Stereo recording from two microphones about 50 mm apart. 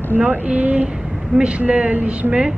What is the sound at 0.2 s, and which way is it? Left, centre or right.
Speech, right.